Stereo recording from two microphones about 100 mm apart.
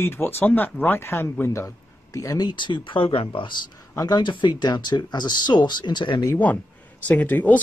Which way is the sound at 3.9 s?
40° left (ahead or behind).